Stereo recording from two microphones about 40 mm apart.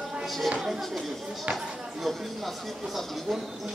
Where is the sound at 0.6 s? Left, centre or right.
Centre.